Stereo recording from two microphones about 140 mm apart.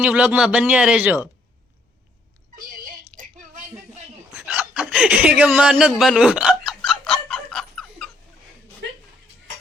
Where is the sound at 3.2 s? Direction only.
65° right (ahead or behind).